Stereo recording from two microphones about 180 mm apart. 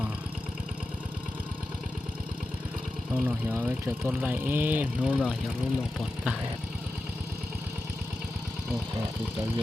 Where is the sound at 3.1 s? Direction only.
10° right (ahead or behind).